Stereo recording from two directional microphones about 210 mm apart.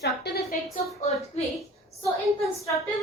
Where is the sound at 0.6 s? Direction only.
Centre (ahead or behind).